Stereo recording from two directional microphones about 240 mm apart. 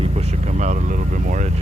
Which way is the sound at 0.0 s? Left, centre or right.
Right.